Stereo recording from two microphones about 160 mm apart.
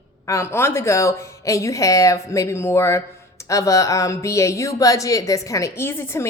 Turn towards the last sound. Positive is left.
turn(degrees=15)  # may be behind; listen again after turning